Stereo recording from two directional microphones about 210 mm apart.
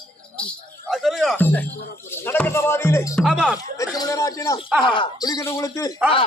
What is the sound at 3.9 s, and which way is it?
Speech, 15° left (ahead or behind).